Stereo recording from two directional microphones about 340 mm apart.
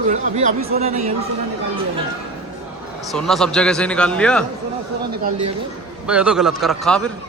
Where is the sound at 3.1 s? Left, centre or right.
Centre.